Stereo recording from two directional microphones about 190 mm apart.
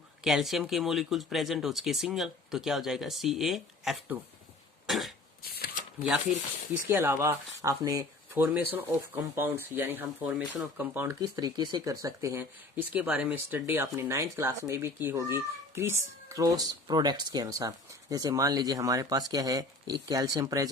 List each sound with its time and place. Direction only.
0.3 s speech: centre (ahead or behind)
4.9 s cough: centre (ahead or behind)
5.4 s shuffling cards: 50° left (ahead or behind)
6.8 s speech: 10° right (ahead or behind)